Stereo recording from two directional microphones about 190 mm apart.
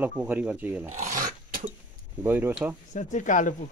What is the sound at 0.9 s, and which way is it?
Filing, 40° right (ahead or behind).